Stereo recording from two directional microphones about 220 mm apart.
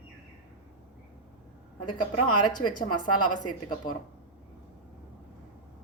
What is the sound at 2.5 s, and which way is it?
A woman's voice, 20° left (ahead or behind).